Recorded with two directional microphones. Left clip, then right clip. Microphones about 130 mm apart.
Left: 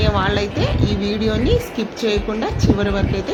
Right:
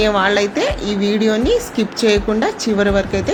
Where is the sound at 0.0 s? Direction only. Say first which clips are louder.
Right 5 dB; 40° right (ahead or behind).